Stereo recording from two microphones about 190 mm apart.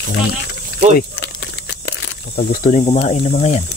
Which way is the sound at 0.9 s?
60° left (ahead or behind).